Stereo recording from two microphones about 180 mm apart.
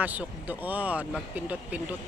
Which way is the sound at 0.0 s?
10° right (ahead or behind).